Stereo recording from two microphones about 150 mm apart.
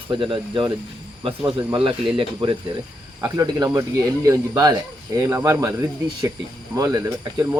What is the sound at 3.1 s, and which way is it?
Speech, 25° right (ahead or behind).